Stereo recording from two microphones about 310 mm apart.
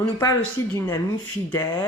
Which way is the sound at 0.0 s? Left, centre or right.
Centre.